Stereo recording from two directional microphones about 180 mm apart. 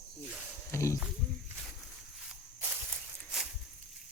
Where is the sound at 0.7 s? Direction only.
15° left (ahead or behind).